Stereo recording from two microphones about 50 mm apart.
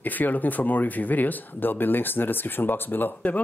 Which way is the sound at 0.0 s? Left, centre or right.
Left.